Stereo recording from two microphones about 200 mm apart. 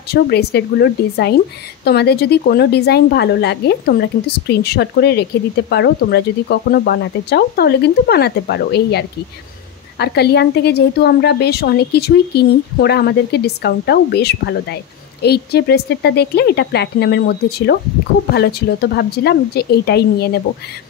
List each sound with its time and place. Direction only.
0.1 s a woman's voice: 55° left (ahead or behind)